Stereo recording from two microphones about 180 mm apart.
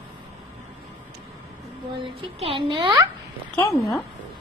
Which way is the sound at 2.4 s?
25° right (ahead or behind).